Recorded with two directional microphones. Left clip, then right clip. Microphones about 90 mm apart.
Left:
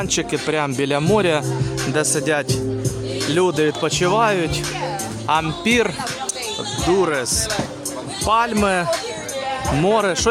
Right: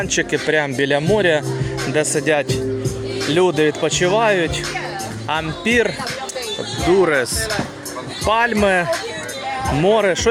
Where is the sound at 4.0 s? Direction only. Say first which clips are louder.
Right 1 dB; 45° left (ahead or behind).